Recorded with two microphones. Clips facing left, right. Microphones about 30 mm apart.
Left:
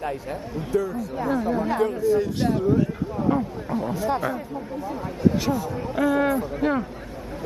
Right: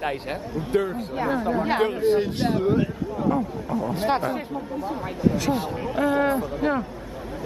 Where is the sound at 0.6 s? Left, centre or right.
Right.